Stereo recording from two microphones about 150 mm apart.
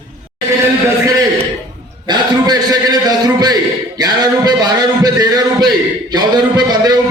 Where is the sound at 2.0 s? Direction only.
30° right (ahead or behind).